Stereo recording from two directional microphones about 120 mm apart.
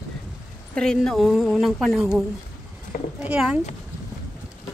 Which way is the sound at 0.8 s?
5° left (ahead or behind).